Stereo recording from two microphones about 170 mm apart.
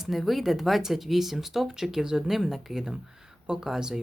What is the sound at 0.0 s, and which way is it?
Speech, centre (ahead or behind).